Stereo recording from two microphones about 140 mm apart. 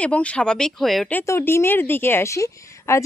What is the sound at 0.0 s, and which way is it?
A woman's voice, 10° left (ahead or behind).